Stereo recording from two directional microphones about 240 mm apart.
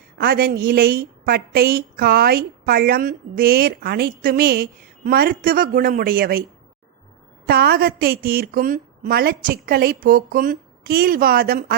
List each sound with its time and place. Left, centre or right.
0.2 s a woman's voice: right
7.4 s a woman's voice: right